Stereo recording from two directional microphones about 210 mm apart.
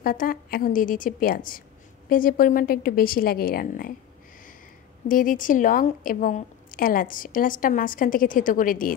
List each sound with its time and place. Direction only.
0.0 s a woman's voice: 40° left (ahead or behind)
5.0 s a woman's voice: 40° left (ahead or behind)